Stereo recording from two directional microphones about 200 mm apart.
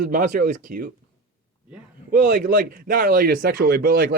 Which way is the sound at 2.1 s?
40° right (ahead or behind).